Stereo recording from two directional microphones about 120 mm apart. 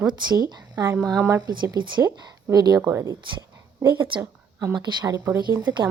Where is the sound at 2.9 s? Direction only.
20° right (ahead or behind).